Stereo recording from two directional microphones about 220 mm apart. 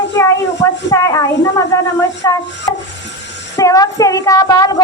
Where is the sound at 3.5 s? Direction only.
15° left (ahead or behind).